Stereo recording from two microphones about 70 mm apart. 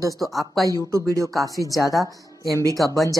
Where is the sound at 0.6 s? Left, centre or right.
Right.